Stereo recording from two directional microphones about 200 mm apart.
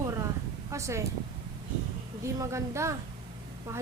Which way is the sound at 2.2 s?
15° right (ahead or behind).